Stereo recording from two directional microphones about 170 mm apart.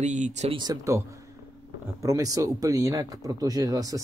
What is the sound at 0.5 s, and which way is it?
Speech, 25° right (ahead or behind).